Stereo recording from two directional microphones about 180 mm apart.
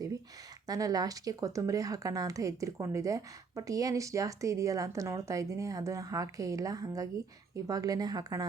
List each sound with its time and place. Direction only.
0.7 s speech: 20° right (ahead or behind)